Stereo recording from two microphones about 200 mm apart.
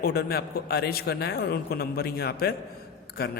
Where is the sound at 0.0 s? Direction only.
50° left (ahead or behind).